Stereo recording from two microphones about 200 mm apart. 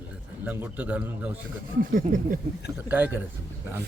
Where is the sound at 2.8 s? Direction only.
10° right (ahead or behind).